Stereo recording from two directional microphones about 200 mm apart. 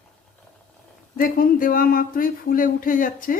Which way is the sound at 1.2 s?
45° left (ahead or behind).